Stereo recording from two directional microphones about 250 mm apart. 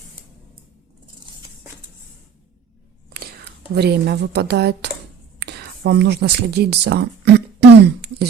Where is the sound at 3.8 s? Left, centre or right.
Right.